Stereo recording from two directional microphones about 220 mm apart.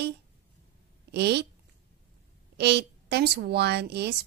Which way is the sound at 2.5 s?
50° right (ahead or behind).